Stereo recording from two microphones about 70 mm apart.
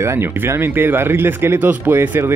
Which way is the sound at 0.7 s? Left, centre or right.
Right.